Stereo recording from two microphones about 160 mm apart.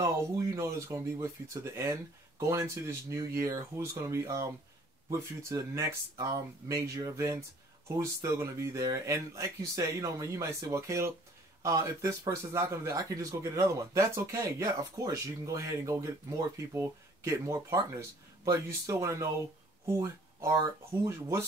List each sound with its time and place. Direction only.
0.0 s speech: 20° right (ahead or behind)